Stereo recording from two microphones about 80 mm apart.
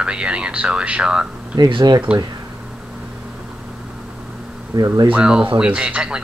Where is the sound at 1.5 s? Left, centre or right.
Right.